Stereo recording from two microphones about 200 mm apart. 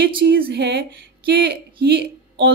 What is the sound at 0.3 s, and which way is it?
Speech, 55° right (ahead or behind).